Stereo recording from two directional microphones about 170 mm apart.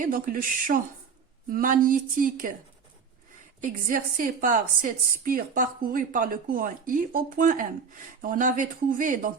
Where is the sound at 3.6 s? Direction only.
55° right (ahead or behind).